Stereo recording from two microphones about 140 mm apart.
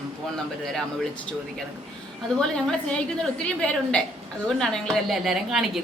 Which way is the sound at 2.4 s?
5° left (ahead or behind).